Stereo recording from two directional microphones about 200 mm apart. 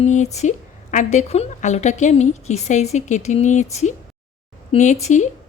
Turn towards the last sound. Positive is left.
turn(degrees=35)  # may be behind; listen again after turning